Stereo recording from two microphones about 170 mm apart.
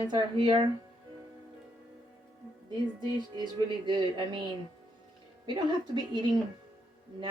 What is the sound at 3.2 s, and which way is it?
Music, 25° right (ahead or behind).